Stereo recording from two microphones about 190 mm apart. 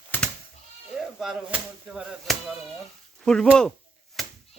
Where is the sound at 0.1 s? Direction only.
10° left (ahead or behind).